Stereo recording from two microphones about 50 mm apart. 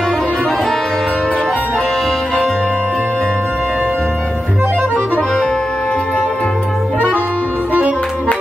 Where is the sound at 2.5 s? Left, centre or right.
Left.